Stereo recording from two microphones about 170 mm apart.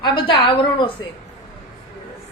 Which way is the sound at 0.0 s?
25° left (ahead or behind).